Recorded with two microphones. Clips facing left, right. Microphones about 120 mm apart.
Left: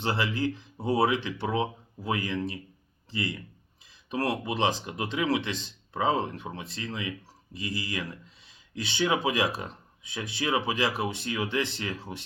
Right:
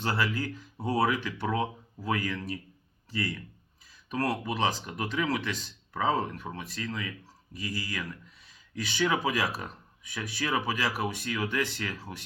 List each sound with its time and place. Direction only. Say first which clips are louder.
0.0 s speech: left 2 dB; 20° left (ahead or behind)